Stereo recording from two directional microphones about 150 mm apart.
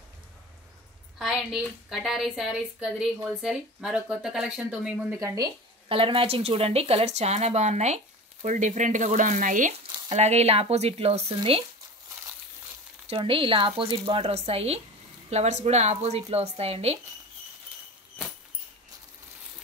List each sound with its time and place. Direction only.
1.1 s a woman's voice: 5° right (ahead or behind)
5.2 s speech: 25° right (ahead or behind)
5.9 s speech: 35° right (ahead or behind); by 9.8 s 60° right (ahead or behind)
10.0 s speech: 45° right (ahead or behind)
13.1 s speech: 35° right (ahead or behind)